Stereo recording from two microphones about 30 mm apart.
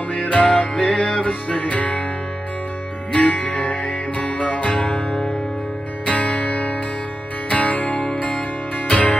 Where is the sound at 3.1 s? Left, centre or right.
Left.